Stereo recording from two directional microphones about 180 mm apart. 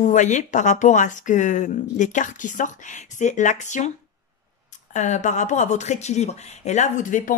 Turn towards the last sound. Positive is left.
turn(degrees=45)  # may be behind; listen again after turning